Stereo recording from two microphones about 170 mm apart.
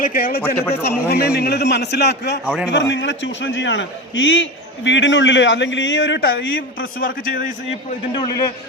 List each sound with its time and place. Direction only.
0.0 s a man's voice: 60° left (ahead or behind)
0.4 s a man's voice: 15° left (ahead or behind)
0.9 s a man's voice: 70° left (ahead or behind)
2.4 s a man's voice: 5° right (ahead or behind)
2.6 s a man's voice: 90° left; by 7.5 s 55° left (ahead or behind)
7.7 s a man's voice: 25° left (ahead or behind)